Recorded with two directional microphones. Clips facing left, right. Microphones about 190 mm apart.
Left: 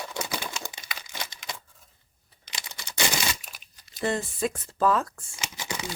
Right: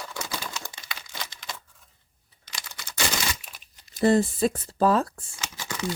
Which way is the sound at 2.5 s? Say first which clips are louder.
Even; 20° left (ahead or behind).